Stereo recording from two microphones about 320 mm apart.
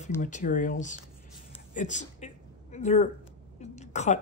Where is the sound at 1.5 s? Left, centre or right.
Left.